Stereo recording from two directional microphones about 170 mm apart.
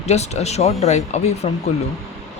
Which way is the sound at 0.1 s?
40° left (ahead or behind).